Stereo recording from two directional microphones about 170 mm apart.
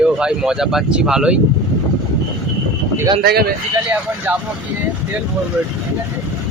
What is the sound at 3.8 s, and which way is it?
Speech, 10° right (ahead or behind).